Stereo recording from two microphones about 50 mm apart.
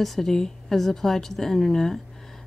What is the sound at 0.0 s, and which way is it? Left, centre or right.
A woman's voice, centre.